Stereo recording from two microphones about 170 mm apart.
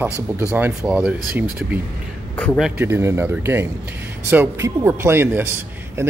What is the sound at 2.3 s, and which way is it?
Speech, 10° left (ahead or behind).